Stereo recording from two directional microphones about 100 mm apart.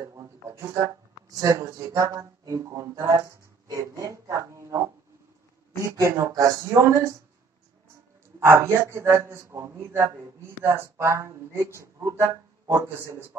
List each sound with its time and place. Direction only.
0.0 s speech: 30° right (ahead or behind)
8.4 s a man's voice: 25° right (ahead or behind)